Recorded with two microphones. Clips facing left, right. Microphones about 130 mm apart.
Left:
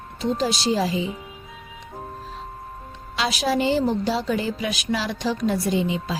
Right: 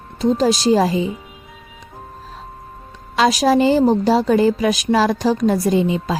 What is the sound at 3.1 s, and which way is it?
A woman's voice, 40° right (ahead or behind).